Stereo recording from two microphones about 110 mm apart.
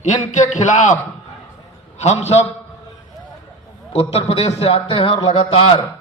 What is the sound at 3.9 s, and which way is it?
A man's voice, 65° left (ahead or behind).